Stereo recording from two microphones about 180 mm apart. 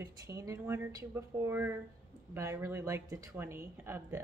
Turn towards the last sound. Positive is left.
turn(degrees=-10)  # may be behind; listen again after turning